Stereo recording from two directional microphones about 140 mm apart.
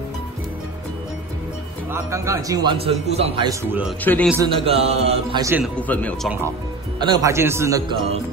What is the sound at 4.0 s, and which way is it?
Speech, 10° left (ahead or behind).